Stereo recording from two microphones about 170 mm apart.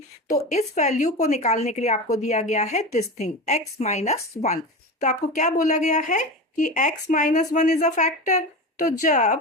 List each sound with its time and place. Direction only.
0.5 s a woman's voice: 45° left (ahead or behind)